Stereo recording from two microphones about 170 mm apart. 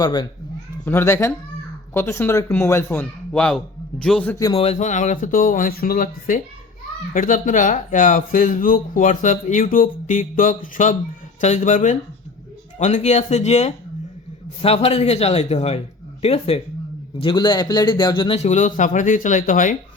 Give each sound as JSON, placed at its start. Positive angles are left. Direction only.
{"t": 0.0, "sound": "speech", "side_deg": 25}
{"t": 0.9, "sound": "a man's voice", "side_deg": 15}
{"t": 4.5, "sound": "a man's voice", "side_deg": 35}
{"t": 18.3, "sound": "speech", "side_deg": 45}